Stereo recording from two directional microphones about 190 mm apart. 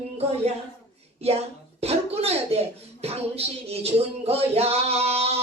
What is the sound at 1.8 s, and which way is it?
Speech, 30° right (ahead or behind).